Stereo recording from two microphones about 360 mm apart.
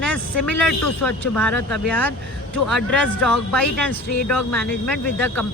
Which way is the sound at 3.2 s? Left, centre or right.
Centre.